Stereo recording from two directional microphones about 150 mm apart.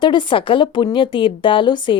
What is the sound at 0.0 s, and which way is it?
A woman's voice, 30° left (ahead or behind).